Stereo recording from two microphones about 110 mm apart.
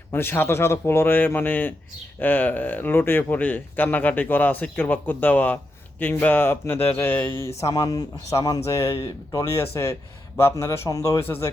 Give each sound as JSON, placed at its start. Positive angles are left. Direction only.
{"t": 0.1, "sound": "speech", "side_deg": 20}